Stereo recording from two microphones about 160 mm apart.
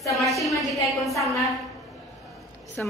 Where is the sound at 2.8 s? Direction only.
10° left (ahead or behind).